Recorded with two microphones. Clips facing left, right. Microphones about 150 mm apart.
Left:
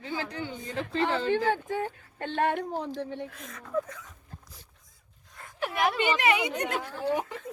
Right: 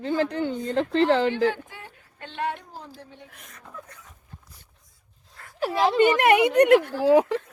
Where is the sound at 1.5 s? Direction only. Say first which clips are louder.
Left 11 dB; 45° left (ahead or behind); by 3.2 s 65° left (ahead or behind).